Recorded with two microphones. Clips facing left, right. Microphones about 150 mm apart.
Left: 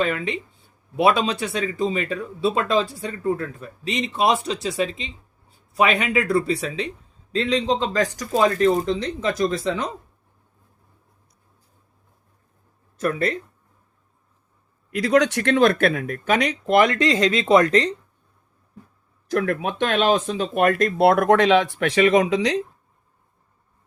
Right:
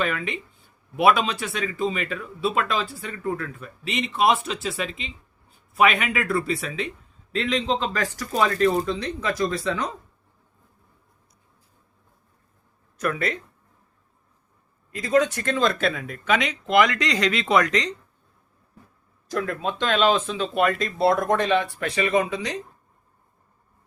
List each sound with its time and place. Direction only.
0.9 s speech: 30° left (ahead or behind)
8.4 s speech: 25° left (ahead or behind)
13.0 s speech: 35° left (ahead or behind)
14.8 s speech: 75° left (ahead or behind); by 17.9 s 30° left (ahead or behind)
19.3 s speech: 65° left (ahead or behind)
19.6 s speech: 50° left (ahead or behind); by 22.6 s 90° left